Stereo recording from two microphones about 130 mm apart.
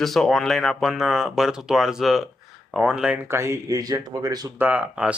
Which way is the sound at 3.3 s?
20° right (ahead or behind).